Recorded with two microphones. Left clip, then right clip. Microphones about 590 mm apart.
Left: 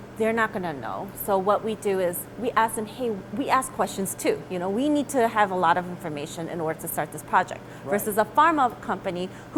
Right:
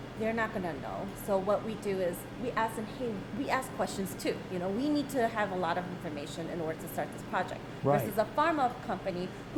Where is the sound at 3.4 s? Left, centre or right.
Left.